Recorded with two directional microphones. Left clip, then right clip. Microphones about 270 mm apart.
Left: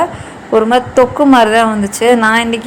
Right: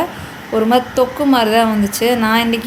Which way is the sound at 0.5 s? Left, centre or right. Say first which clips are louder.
Left 5 dB; left.